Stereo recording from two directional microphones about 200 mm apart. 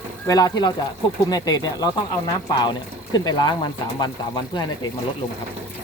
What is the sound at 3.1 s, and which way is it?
Speech, 20° left (ahead or behind).